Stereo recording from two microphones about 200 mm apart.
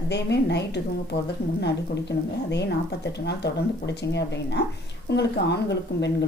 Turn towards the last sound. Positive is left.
turn(degrees=60)  # may be behind; listen again after turning